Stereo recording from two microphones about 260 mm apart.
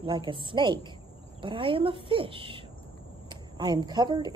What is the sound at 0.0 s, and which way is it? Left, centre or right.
A woman's voice, centre.